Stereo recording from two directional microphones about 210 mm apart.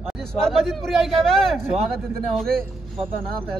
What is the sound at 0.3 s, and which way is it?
Speech, centre (ahead or behind).